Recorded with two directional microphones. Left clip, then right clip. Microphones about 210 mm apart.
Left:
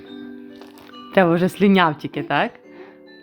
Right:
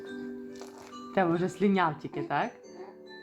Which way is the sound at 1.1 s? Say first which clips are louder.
Left 11 dB; 50° left (ahead or behind).